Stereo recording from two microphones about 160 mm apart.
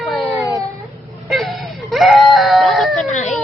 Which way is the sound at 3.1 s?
50° left (ahead or behind).